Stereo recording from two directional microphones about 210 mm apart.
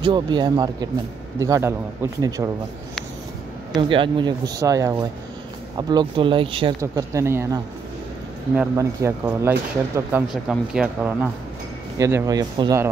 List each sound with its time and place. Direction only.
0.0 s speech: 20° right (ahead or behind)
3.9 s speech: 25° right (ahead or behind)
6.8 s speech: 15° right (ahead or behind)